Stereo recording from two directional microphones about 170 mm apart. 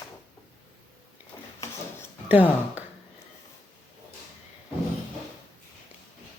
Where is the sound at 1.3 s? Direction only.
20° left (ahead or behind).